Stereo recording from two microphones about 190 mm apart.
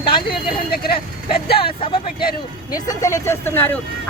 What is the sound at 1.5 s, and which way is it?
A man's voice, 30° left (ahead or behind).